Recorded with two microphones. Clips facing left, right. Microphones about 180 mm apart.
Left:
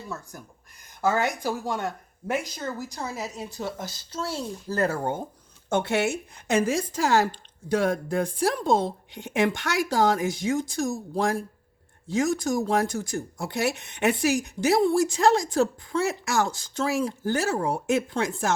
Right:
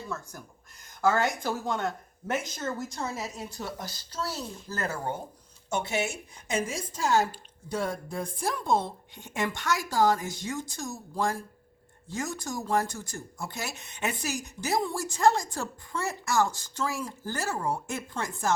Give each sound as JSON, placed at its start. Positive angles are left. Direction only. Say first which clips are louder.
{"t": 1.0, "sound": "speech", "louder": "left 1 dB", "side_deg": 15}
{"t": 3.6, "sound": "speech", "louder": "left 6 dB", "side_deg": 20}
{"t": 5.6, "sound": "speech", "louder": "left 6 dB", "side_deg": 55}